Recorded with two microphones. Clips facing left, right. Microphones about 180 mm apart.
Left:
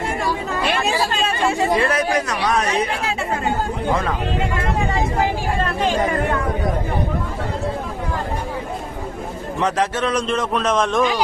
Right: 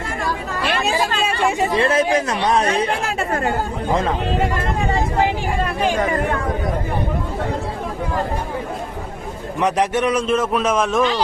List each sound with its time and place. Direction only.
0.9 s speech: 15° right (ahead or behind)
3.1 s speech: 55° right (ahead or behind)
9.6 s a man's voice: 15° right (ahead or behind)